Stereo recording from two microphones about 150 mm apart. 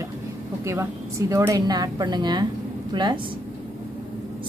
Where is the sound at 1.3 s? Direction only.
25° right (ahead or behind).